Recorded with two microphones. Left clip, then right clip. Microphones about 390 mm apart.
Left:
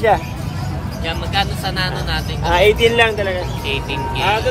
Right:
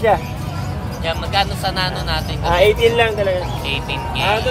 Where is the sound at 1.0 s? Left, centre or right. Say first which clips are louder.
Right 1 dB; centre.